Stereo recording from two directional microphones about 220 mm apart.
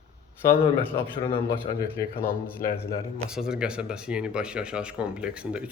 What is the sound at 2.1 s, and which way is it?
Speech, 40° left (ahead or behind).